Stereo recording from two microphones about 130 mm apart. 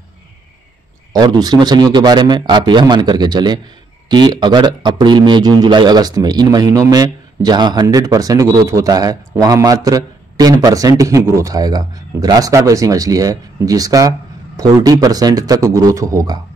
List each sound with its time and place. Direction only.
1.1 s a man's voice: 30° right (ahead or behind)